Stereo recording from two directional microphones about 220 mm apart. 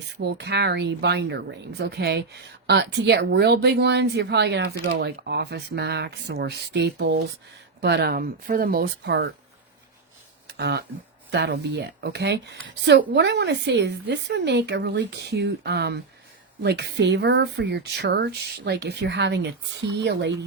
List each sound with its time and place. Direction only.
0.2 s speech: 50° right (ahead or behind)
10.4 s a sound: 50° right (ahead or behind)
11.3 s speech: 50° right (ahead or behind)